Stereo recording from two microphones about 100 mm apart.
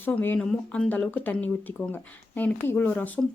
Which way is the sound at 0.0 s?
20° left (ahead or behind).